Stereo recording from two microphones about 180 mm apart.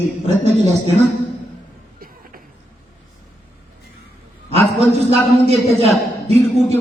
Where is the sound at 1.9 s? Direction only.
50° right (ahead or behind).